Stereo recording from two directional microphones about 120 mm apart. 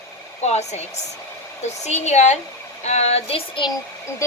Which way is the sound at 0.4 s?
70° left (ahead or behind).